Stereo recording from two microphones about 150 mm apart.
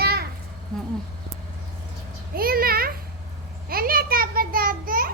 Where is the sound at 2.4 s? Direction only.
80° right.